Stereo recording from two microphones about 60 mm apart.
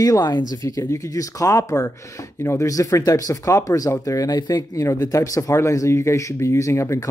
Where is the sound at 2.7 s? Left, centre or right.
Left.